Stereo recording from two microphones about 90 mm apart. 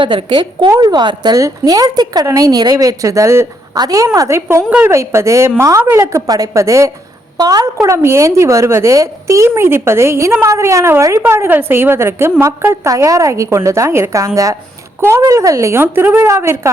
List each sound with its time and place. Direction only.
0.0 s a woman's voice: 70° right (ahead or behind); by 1.4 s 55° right (ahead or behind)
1.4 s a woman's voice: 40° right (ahead or behind)
7.3 s a woman's voice: 45° right (ahead or behind)
7.9 s a woman's voice: 30° right (ahead or behind)